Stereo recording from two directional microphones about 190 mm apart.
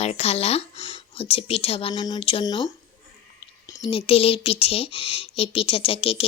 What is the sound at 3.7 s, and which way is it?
Speech, 25° left (ahead or behind).